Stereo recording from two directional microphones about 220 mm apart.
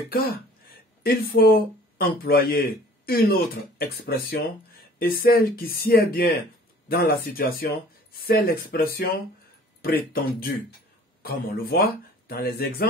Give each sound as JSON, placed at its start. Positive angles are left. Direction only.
{"t": 0.1, "sound": "speech", "side_deg": 45}